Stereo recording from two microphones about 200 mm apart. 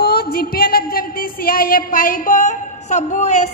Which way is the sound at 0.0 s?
50° left (ahead or behind).